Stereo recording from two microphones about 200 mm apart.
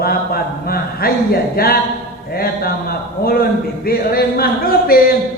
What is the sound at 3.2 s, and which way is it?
Speech, 50° left (ahead or behind).